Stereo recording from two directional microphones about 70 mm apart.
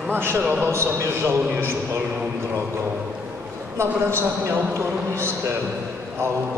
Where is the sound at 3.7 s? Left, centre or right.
Right.